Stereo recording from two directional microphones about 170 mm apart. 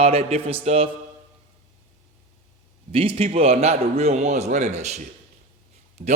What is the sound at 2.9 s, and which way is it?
A man's voice, 35° right (ahead or behind).